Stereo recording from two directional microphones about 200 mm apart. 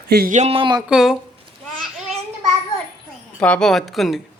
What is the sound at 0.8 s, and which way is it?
Speech, centre (ahead or behind).